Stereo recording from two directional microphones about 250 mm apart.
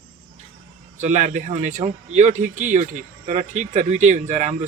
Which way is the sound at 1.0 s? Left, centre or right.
Right.